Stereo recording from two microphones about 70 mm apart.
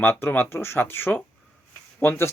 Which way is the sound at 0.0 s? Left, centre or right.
Left.